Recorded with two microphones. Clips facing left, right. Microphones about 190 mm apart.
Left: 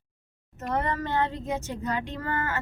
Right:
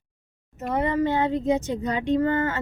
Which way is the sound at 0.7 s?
15° right (ahead or behind).